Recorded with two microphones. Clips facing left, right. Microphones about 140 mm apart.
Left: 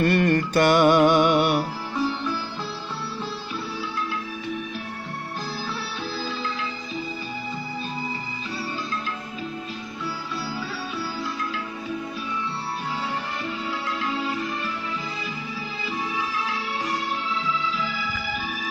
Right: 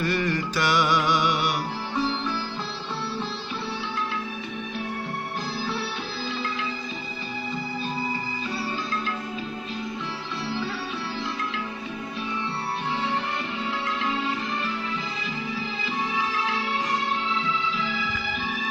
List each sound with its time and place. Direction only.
0.0 s music: 55° left (ahead or behind)